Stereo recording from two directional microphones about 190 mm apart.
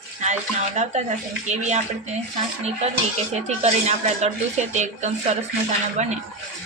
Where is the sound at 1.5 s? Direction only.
40° right (ahead or behind).